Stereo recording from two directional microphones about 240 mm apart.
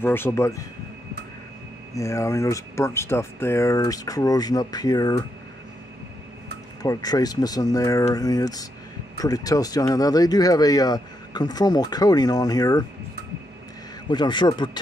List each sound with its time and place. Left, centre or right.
0.0 s speech: centre
2.0 s speech: centre
6.8 s speech: centre
14.0 s a man's voice: centre